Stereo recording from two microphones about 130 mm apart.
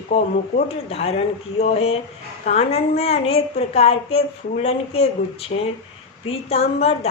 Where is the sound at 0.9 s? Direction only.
50° left (ahead or behind).